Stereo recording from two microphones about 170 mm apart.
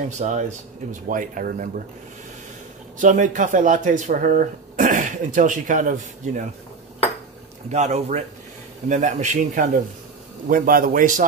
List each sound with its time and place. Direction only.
0.2 s speech: 45° right (ahead or behind)
3.0 s speech: 50° right (ahead or behind)
7.7 s speech: 45° right (ahead or behind)
10.5 s speech: 55° right (ahead or behind)